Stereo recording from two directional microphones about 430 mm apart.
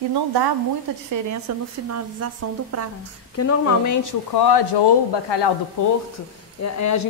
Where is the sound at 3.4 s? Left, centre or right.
Left.